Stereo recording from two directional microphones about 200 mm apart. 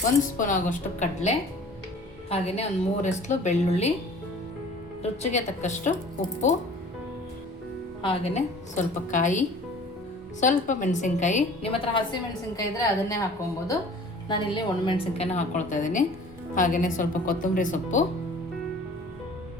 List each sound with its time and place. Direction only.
0.3 s a woman's voice: 40° left (ahead or behind)
5.2 s a woman's voice: 35° left (ahead or behind)
8.0 s a woman's voice: 30° left (ahead or behind)
10.4 s a woman's voice: 40° left (ahead or behind)
12.5 s a woman's voice: 15° left (ahead or behind)
14.3 s a woman's voice: 25° left (ahead or behind); by 18.0 s 40° left (ahead or behind)